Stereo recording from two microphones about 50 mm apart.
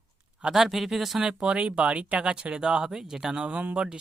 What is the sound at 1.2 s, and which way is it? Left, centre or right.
Speech, centre.